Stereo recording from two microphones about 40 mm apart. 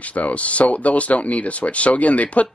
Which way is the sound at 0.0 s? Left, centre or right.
Left.